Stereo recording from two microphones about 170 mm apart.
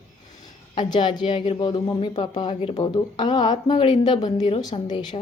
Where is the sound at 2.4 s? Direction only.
25° left (ahead or behind).